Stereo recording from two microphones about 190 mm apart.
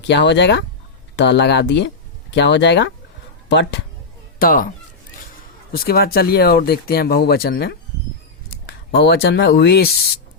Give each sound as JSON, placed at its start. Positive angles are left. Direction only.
{"t": 0.1, "sound": "speech", "side_deg": 65}
{"t": 4.4, "sound": "speech", "side_deg": 45}
{"t": 5.7, "sound": "speech", "side_deg": 50}